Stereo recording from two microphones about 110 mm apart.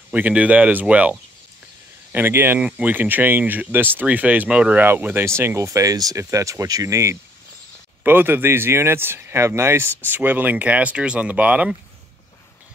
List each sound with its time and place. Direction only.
0.1 s speech: 15° right (ahead or behind)